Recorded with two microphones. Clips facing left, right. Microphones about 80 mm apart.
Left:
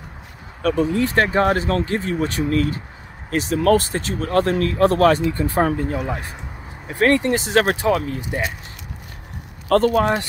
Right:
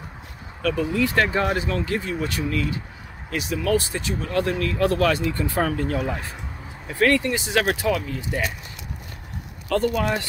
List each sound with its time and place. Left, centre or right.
0.6 s speech: left
7.2 s speech: left
8.2 s speech: left
9.7 s speech: left